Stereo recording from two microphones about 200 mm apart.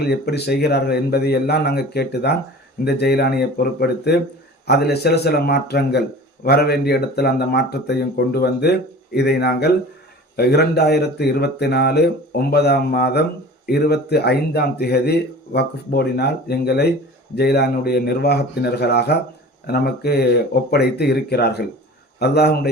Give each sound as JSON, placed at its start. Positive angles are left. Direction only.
{"t": 0.0, "sound": "speech", "side_deg": 55}